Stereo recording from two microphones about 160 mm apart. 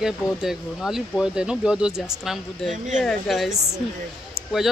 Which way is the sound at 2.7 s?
50° right (ahead or behind).